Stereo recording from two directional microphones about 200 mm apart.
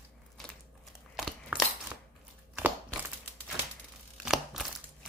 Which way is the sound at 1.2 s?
Centre (ahead or behind).